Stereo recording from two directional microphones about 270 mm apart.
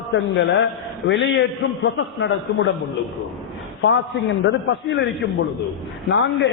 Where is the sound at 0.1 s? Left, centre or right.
Left.